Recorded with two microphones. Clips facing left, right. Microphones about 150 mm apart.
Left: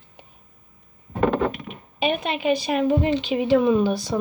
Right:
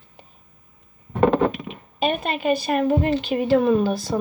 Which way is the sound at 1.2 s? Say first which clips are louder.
Right 3 dB; 35° right (ahead or behind).